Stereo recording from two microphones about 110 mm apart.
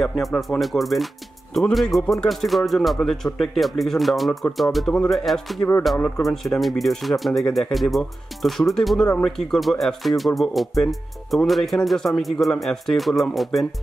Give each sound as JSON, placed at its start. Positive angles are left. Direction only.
{"t": 0.0, "sound": "speech", "side_deg": 5}
{"t": 5.9, "sound": "speech", "side_deg": 15}
{"t": 6.2, "sound": "speech", "side_deg": 5}